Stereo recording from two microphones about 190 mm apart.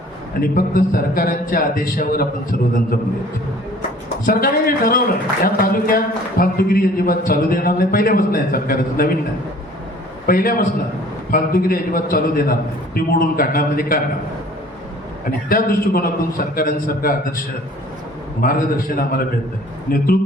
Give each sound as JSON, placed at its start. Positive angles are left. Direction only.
{"t": 0.5, "sound": "a man's voice", "side_deg": 50}
{"t": 4.3, "sound": "a man's voice", "side_deg": 50}
{"t": 10.2, "sound": "a man's voice", "side_deg": 50}
{"t": 15.4, "sound": "a man's voice", "side_deg": 50}
{"t": 18.4, "sound": "a man's voice", "side_deg": 50}